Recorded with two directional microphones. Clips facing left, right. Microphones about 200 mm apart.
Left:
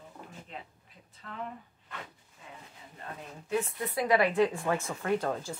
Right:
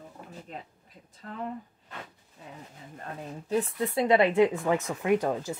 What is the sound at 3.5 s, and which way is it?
Speech, 25° right (ahead or behind).